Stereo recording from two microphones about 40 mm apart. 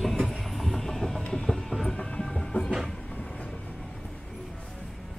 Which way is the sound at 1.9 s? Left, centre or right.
Left.